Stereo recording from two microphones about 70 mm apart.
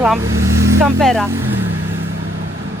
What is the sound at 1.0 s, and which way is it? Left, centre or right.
Speech, centre.